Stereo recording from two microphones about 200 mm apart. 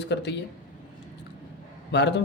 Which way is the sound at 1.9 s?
60° left (ahead or behind).